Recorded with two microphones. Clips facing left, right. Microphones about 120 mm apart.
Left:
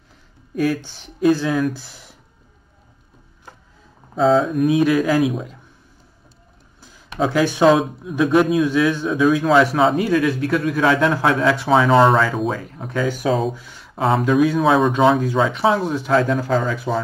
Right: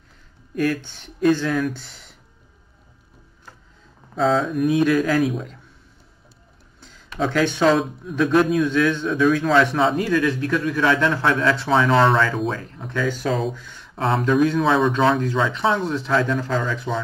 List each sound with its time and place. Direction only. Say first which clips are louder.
0.8 s speech: left 2 dB; 5° left (ahead or behind)
4.2 s speech: left 4 dB; centre (ahead or behind)
7.2 s speech: left 3 dB; 5° left (ahead or behind)
16.3 s speech: left 4 dB; 40° left (ahead or behind)